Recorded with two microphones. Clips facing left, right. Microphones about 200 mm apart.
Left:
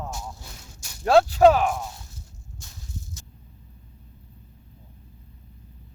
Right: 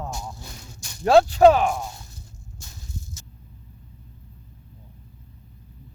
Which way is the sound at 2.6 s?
Centre (ahead or behind).